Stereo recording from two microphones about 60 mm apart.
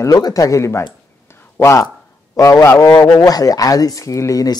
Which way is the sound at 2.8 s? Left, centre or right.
Left.